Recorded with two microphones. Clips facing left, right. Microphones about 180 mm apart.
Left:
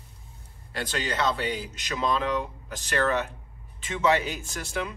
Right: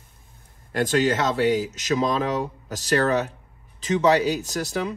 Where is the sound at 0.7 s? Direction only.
45° right (ahead or behind).